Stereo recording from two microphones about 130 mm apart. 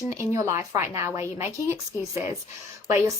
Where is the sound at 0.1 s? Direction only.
20° right (ahead or behind).